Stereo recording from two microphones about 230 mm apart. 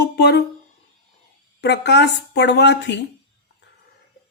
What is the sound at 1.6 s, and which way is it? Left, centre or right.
Speech, left.